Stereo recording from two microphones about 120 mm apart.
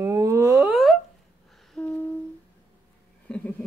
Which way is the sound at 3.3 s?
10° left (ahead or behind).